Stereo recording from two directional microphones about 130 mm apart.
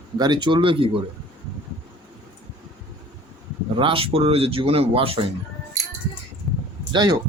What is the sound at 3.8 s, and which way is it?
Speech, 45° right (ahead or behind).